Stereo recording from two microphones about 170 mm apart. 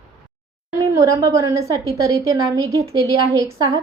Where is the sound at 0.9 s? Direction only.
20° right (ahead or behind).